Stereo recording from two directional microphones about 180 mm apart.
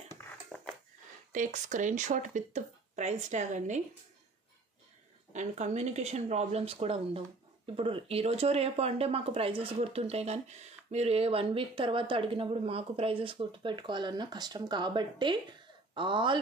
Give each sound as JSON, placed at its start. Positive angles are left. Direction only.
{"t": 0.5, "sound": "a sound", "side_deg": -5}
{"t": 1.3, "sound": "speech", "side_deg": -45}
{"t": 5.3, "sound": "speech", "side_deg": -40}